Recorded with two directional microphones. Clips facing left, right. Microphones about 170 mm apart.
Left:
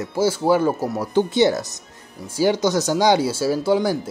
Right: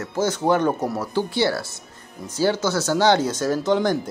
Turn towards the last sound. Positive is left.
turn(degrees=10)  # may be behind; listen again after turning